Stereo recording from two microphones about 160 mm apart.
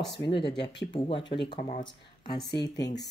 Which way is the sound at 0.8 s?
30° left (ahead or behind).